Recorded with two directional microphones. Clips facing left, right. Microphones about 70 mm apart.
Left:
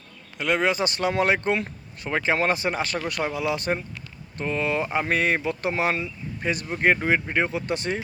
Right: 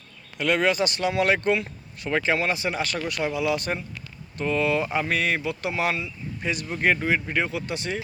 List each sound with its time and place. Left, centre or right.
0.3 s speech: left